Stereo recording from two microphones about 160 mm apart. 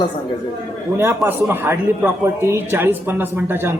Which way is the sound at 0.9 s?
15° right (ahead or behind).